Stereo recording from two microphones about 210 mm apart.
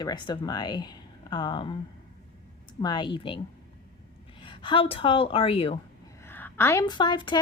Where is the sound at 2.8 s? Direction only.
20° left (ahead or behind).